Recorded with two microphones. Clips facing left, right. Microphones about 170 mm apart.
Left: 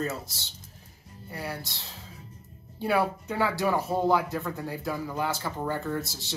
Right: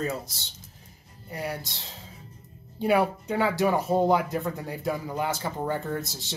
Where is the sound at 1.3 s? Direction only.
15° right (ahead or behind).